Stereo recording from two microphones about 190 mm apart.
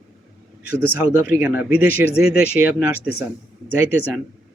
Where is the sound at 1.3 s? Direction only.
10° right (ahead or behind).